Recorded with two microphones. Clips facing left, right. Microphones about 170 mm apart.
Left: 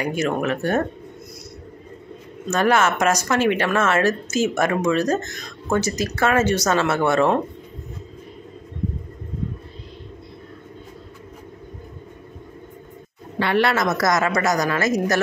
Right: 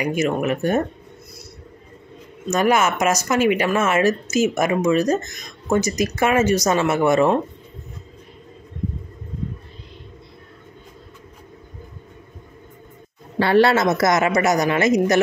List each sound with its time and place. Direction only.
0.0 s speech: 10° right (ahead or behind)
2.5 s speech: 10° right (ahead or behind)
13.4 s a woman's voice: 30° right (ahead or behind)